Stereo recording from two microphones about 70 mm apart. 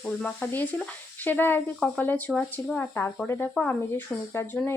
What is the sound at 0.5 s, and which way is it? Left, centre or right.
Speech, left.